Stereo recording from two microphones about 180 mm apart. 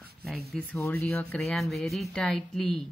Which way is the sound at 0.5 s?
Centre (ahead or behind).